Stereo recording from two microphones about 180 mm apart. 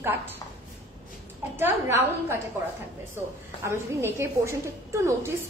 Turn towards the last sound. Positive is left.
turn(degrees=-15)  # may be behind; listen again after turning